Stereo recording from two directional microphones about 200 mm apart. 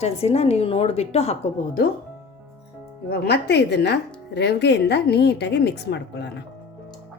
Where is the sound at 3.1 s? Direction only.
55° left (ahead or behind).